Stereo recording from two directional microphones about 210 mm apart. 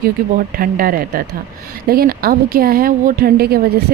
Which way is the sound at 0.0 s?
45° right (ahead or behind).